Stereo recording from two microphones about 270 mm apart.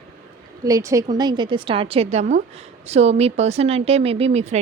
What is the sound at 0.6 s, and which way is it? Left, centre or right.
A woman's voice, centre.